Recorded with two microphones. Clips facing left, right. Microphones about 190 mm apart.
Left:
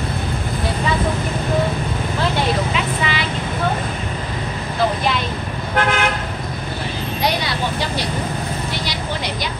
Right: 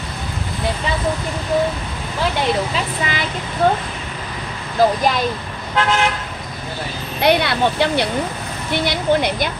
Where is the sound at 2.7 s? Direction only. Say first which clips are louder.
Left 1 dB; 45° right (ahead or behind).